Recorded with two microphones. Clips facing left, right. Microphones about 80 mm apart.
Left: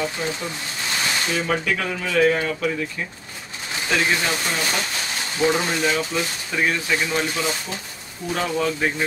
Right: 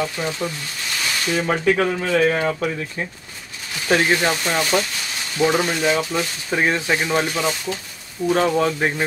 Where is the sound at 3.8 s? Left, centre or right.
Right.